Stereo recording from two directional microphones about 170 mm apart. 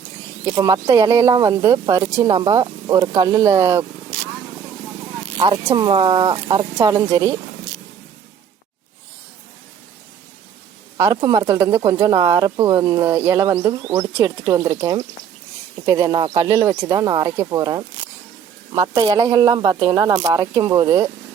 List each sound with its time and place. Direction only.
0.5 s speech: 20° right (ahead or behind)
5.4 s speech: 25° right (ahead or behind)
6.7 s speech: 20° right (ahead or behind)
10.9 s speech: 20° right (ahead or behind)